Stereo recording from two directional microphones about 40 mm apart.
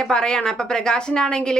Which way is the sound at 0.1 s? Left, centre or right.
Centre.